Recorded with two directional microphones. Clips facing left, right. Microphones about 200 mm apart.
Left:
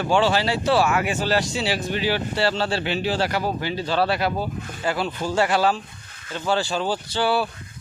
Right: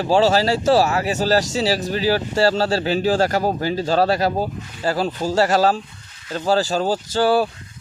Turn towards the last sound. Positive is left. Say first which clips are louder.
# right 5 dB
turn(degrees=-45)  # may be behind; listen again after turning